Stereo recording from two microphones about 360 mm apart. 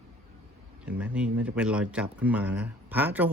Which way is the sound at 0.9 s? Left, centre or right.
Centre.